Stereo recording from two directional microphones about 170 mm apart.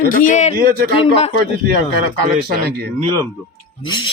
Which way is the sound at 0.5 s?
60° right (ahead or behind).